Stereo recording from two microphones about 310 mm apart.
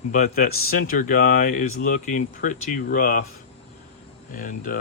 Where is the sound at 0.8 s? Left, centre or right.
Left.